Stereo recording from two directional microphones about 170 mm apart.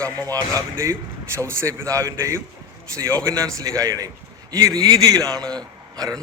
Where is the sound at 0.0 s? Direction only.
20° right (ahead or behind).